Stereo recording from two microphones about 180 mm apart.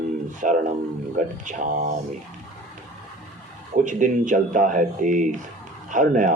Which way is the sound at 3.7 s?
45° right (ahead or behind).